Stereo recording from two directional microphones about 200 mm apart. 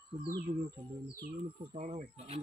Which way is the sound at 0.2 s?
15° right (ahead or behind).